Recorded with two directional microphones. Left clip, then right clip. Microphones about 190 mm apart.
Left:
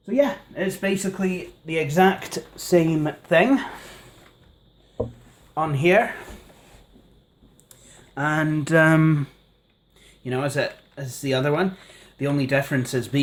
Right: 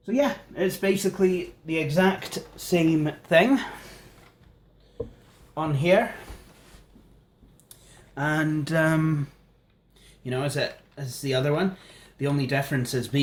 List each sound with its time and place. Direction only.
0.0 s speech: 5° left (ahead or behind)
1.6 s speech: 35° left (ahead or behind); by 4.0 s 15° left (ahead or behind)
5.5 s speech: 35° left (ahead or behind)
7.7 s speech: 30° left (ahead or behind)